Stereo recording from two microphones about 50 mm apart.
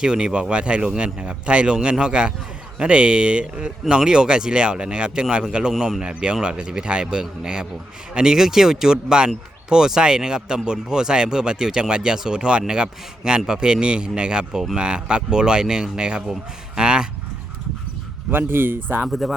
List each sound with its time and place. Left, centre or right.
0.0 s speech: centre
18.3 s a man's voice: right
19.0 s speech: centre